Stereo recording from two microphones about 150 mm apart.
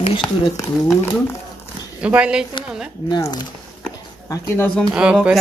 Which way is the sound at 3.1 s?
25° left (ahead or behind).